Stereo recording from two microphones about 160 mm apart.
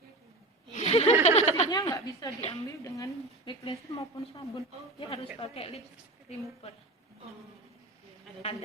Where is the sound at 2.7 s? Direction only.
20° left (ahead or behind).